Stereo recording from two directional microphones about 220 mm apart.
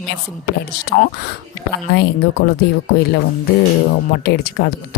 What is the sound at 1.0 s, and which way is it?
Speech, 45° left (ahead or behind).